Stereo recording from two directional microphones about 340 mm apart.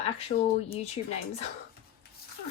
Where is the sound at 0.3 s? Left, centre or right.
Left.